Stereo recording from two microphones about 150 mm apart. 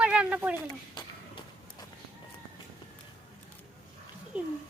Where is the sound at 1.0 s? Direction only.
30° left (ahead or behind).